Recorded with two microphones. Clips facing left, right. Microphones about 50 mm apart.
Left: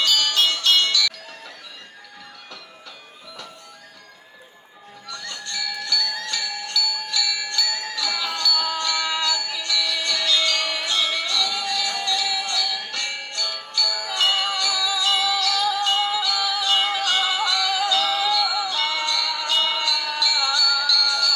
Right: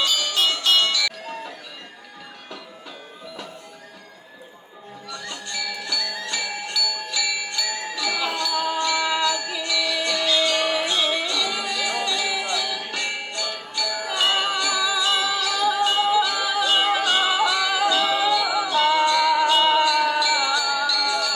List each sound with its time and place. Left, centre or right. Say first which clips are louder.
0.3 s music: right 2 dB; right
5.0 s music: even; centre